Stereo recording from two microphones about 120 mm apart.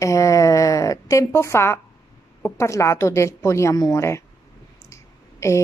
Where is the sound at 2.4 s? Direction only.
25° left (ahead or behind).